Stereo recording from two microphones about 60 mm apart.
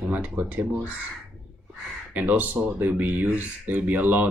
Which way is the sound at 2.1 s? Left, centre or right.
Right.